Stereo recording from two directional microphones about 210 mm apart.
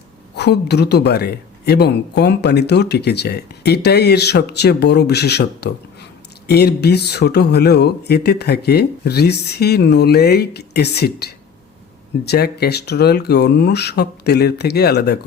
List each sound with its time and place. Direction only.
0.3 s speech: 50° left (ahead or behind)